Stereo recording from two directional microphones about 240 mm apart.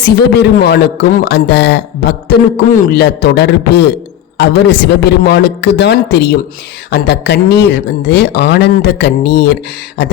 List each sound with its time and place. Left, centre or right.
0.0 s a man's voice: left